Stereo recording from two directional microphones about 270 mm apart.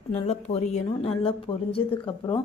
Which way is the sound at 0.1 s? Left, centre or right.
Left.